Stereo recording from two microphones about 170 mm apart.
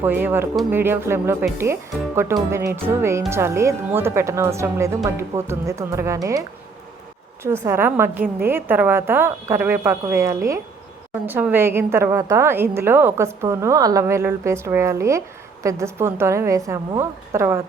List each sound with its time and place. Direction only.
0.0 s speech: 10° right (ahead or behind)
7.4 s speech: 15° right (ahead or behind)